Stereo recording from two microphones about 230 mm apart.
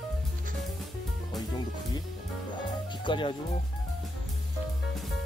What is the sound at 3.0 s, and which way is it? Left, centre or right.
Speech, left.